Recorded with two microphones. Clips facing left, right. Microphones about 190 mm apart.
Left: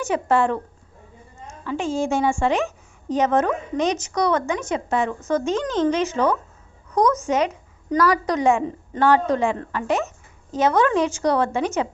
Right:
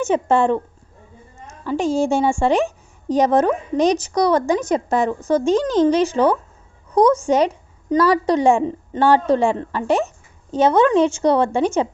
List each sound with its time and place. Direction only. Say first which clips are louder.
0.0 s a woman's voice: right 3 dB; 25° right (ahead or behind)
1.6 s a woman's voice: right 5 dB; 35° right (ahead or behind)